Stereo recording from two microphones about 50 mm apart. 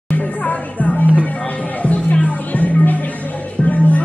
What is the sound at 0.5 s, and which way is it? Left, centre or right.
Music, left.